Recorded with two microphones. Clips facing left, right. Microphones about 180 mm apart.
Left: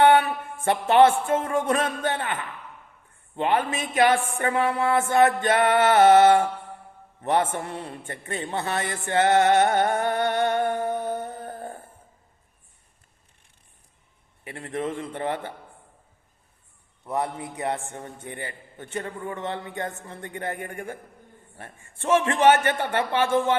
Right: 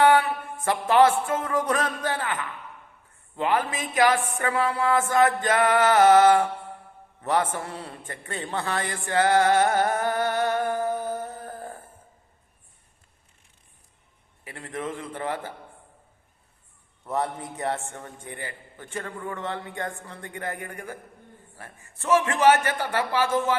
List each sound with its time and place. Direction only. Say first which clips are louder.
0.0 s a sound: left 1 dB; 25° left (ahead or behind)
1.3 s a man's voice: left 2 dB; 25° left (ahead or behind)
9.0 s music: left 1 dB; 25° left (ahead or behind)
14.4 s a man's voice: left 3 dB; 25° left (ahead or behind)
17.1 s a man's voice: even; 15° left (ahead or behind)